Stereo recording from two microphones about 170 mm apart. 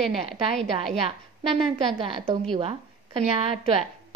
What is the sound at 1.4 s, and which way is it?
Speech, 30° right (ahead or behind).